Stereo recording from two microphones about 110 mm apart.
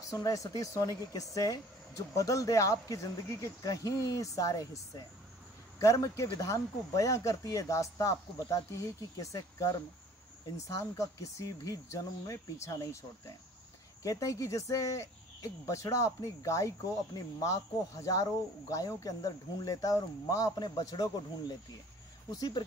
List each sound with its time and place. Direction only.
0.1 s speech: 30° left (ahead or behind)
5.8 s speech: 30° left (ahead or behind)
14.0 s speech: 30° left (ahead or behind)